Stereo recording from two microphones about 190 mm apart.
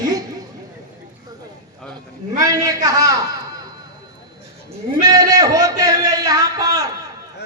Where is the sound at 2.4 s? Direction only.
20° right (ahead or behind).